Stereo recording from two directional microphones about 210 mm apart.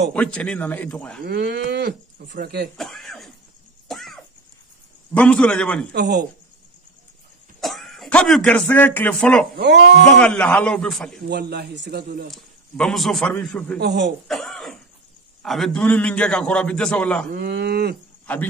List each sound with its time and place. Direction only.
0.1 s a man's voice: 5° left (ahead or behind)
1.2 s speech: 50° right (ahead or behind)
2.8 s throat clearing: centre (ahead or behind)
3.9 s a sound: centre (ahead or behind)
5.1 s a man's voice: 5° left (ahead or behind)
5.9 s a man's voice: 55° right (ahead or behind)
7.6 s a man's voice: centre (ahead or behind)
11.2 s speech: 50° right (ahead or behind)
12.3 s a man's voice: 5° left (ahead or behind)
13.7 s a man's voice: 55° right (ahead or behind)
14.2 s cough: centre (ahead or behind)
15.4 s a man's voice: centre (ahead or behind)
17.3 s speech: 50° right (ahead or behind)
18.3 s speech: 5° left (ahead or behind)